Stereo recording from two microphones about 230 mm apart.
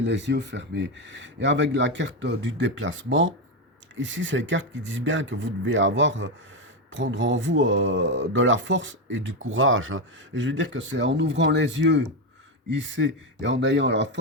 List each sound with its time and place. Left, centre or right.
0.0 s speech: right